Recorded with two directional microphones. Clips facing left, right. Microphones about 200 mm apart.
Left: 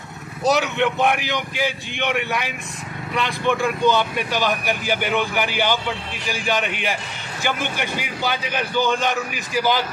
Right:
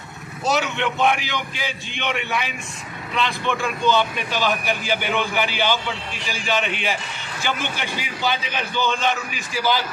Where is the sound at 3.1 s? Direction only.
15° left (ahead or behind).